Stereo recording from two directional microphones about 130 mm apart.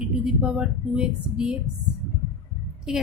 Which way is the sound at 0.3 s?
10° right (ahead or behind).